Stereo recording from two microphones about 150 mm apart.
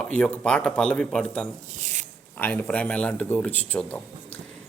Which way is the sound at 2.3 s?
10° left (ahead or behind).